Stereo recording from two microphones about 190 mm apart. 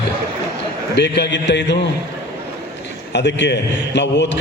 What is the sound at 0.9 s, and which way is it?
Speech, 60° left (ahead or behind).